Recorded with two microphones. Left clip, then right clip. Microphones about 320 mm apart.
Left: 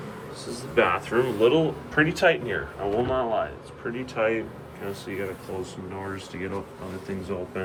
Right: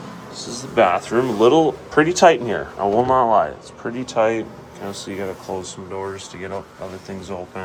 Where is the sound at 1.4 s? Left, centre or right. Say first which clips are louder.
Right 8 dB; right.